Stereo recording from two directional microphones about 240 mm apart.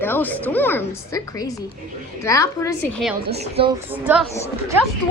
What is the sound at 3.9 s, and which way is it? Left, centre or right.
Speech, centre.